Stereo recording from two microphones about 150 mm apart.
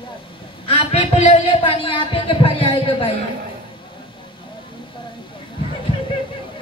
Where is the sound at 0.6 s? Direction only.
40° left (ahead or behind).